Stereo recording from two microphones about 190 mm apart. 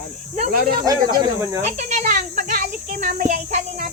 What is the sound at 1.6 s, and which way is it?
A child's voice, 40° right (ahead or behind).